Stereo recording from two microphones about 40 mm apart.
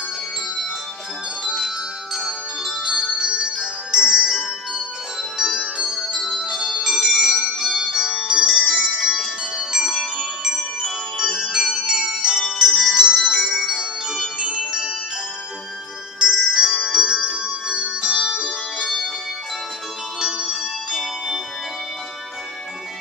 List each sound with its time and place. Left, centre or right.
1.4 s bell: centre
2.2 s music: centre
5.4 s music: centre
5.9 s bell: centre
6.5 s music: centre
9.1 s music: centre
13.4 s bell: centre
13.7 s music: centre
16.2 s music: centre
20.4 s music: centre